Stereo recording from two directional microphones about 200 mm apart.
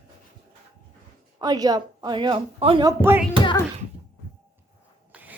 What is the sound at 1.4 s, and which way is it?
A woman's voice, 20° right (ahead or behind).